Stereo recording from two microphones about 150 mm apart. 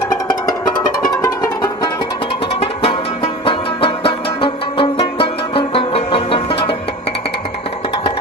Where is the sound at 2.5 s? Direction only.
40° left (ahead or behind).